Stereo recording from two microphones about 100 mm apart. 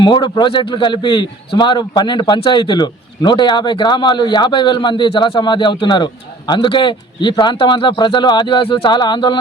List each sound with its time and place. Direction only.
0.0 s a man's voice: 50° left (ahead or behind)